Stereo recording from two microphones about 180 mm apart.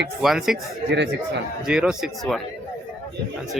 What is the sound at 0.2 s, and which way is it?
Speech, centre (ahead or behind).